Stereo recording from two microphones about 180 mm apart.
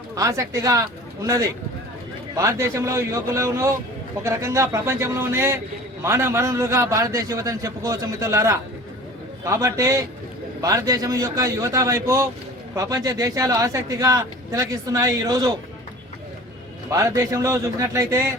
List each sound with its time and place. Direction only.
0.2 s a man's voice: 15° right (ahead or behind)
2.3 s a man's voice: 15° right (ahead or behind)
16.9 s a man's voice: 20° right (ahead or behind)